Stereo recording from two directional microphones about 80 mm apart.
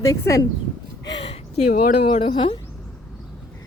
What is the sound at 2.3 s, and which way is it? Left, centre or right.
Speech, left.